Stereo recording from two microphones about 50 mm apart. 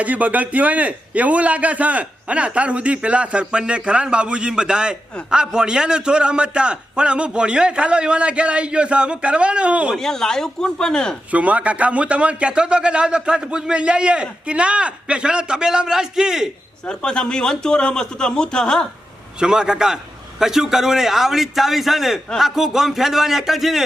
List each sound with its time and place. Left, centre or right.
0.0 s speech: right
9.9 s speech: centre
11.3 s speech: right; by 16.5 s centre
16.8 s speech: centre
19.4 s a man's voice: centre